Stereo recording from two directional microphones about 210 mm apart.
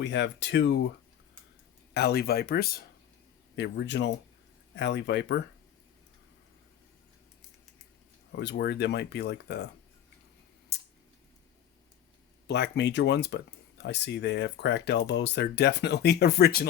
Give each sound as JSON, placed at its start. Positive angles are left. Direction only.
{"t": 0.0, "sound": "speech", "side_deg": 55}
{"t": 1.9, "sound": "speech", "side_deg": 50}
{"t": 8.4, "sound": "speech", "side_deg": 50}
{"t": 10.7, "sound": "a sound", "side_deg": 50}
{"t": 12.5, "sound": "speech", "side_deg": 55}